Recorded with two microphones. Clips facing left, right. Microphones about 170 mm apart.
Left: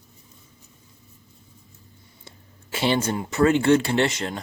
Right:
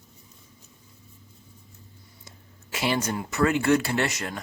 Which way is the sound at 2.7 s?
30° left (ahead or behind).